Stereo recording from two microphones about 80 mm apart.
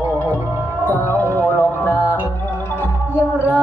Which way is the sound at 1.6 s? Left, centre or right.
Left.